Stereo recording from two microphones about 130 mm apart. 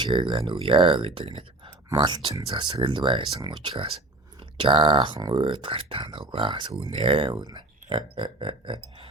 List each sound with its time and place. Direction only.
0.0 s speech: 35° right (ahead or behind)
2.0 s speech: 35° right (ahead or behind)